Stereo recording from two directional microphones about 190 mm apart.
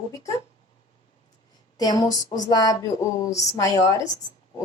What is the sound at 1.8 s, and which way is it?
A woman's voice, 20° left (ahead or behind).